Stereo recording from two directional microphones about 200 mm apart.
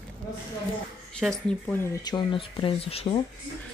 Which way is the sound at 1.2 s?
5° left (ahead or behind).